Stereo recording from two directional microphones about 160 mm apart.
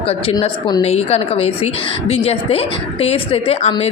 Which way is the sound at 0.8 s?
40° left (ahead or behind).